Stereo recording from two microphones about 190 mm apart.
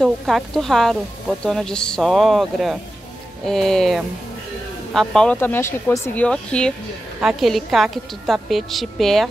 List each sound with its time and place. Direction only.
0.0 s a woman's voice: centre (ahead or behind)